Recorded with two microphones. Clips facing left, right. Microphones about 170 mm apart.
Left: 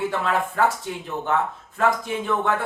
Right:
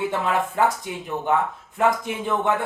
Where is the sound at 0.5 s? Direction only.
15° right (ahead or behind).